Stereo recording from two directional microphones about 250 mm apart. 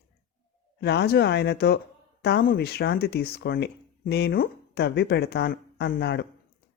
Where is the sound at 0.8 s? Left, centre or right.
Left.